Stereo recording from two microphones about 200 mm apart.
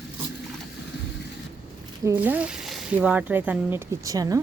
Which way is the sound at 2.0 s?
10° right (ahead or behind).